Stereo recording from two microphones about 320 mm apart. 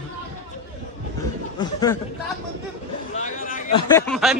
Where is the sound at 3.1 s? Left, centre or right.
Left; by 4.4 s centre.